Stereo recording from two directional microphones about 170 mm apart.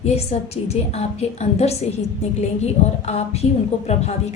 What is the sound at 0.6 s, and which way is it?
A woman's voice, 40° left (ahead or behind).